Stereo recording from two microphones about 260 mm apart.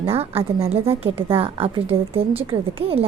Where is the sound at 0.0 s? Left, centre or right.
Right.